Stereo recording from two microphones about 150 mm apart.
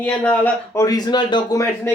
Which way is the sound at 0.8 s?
25° left (ahead or behind).